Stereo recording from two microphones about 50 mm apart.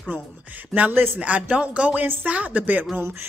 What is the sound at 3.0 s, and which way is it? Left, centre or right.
Speech, right.